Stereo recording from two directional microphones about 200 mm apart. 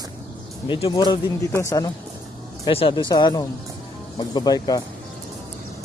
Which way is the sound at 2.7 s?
25° left (ahead or behind).